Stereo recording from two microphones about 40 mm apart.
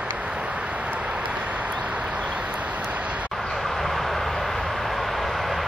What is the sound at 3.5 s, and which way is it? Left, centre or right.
Vehicle, centre.